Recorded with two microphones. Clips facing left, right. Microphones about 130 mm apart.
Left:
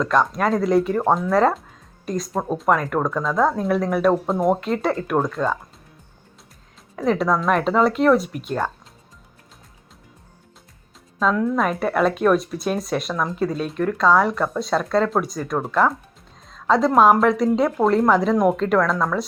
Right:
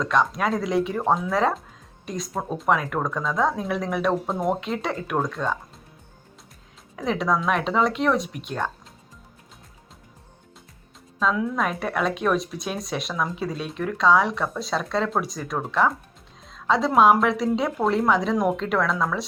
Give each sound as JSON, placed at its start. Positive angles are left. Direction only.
{"t": 0.0, "sound": "speech", "side_deg": 0}
{"t": 6.9, "sound": "speech", "side_deg": 0}
{"t": 11.2, "sound": "a woman's voice", "side_deg": 0}